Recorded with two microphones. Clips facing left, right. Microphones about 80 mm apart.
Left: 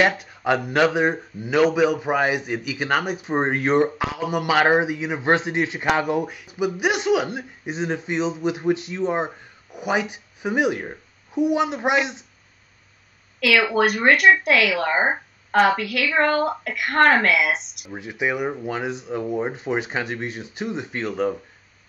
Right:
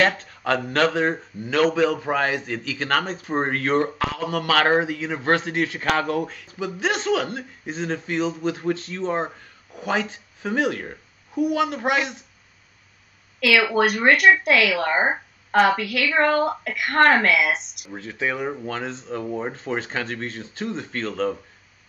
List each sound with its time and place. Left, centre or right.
0.0 s speech: centre
13.4 s speech: centre
17.9 s speech: centre